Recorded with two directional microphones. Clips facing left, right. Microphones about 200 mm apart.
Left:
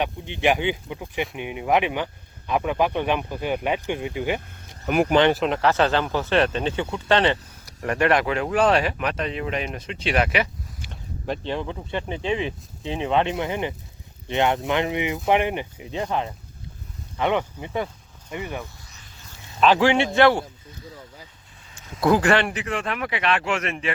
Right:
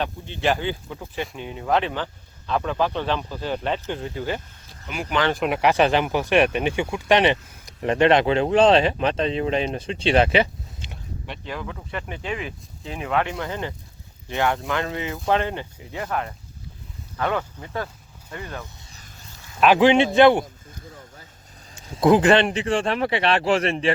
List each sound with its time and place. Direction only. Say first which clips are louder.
0.0 s speech: left 2 dB; 15° left (ahead or behind)
4.9 s speech: left 11 dB; 55° left (ahead or behind)
5.5 s speech: right 1 dB; 15° right (ahead or behind)
11.4 s speech: left 4 dB; 30° left (ahead or behind)
18.8 s vehicle: right 1 dB; 30° right (ahead or behind)
19.5 s speech: right 2 dB; 10° right (ahead or behind)
21.7 s speech: right 3 dB; 30° right (ahead or behind)